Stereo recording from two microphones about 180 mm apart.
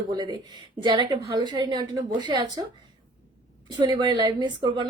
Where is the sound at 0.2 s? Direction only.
25° right (ahead or behind).